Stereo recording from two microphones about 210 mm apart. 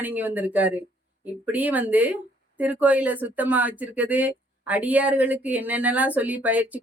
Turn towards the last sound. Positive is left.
turn(degrees=-5)  # may be behind; listen again after turning